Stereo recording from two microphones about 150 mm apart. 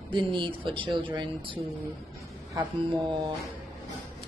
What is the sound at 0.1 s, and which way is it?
A woman's voice, 30° right (ahead or behind).